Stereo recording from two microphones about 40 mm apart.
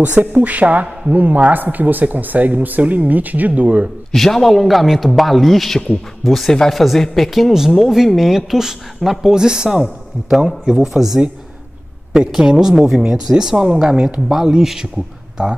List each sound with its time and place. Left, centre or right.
0.0 s speech: right
4.1 s a man's voice: centre
9.3 s a woman's voice: centre
10.9 s a man's voice: centre
12.3 s a woman's voice: centre
14.3 s a woman's voice: centre